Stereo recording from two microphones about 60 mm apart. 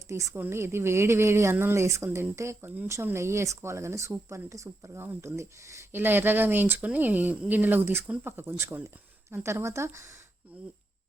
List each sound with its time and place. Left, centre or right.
0.1 s speech: right
0.3 s speech: right
2.8 s speech: right
5.9 s speech: right
10.5 s speech: right